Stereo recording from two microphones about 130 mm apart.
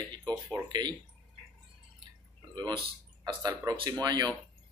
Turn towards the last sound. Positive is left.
turn(degrees=-30)  # may be behind; listen again after turning